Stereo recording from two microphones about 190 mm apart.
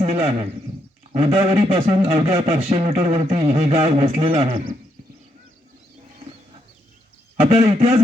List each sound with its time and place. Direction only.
0.0 s a sound: 30° right (ahead or behind)
1.2 s speech: 30° right (ahead or behind)
4.4 s speech: 50° right (ahead or behind)
7.4 s speech: 30° right (ahead or behind)